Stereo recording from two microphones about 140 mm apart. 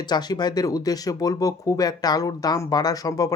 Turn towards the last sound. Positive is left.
turn(degrees=25)  # may be behind; listen again after turning